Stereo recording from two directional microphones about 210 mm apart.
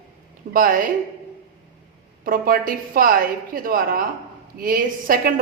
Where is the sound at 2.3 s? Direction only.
40° right (ahead or behind).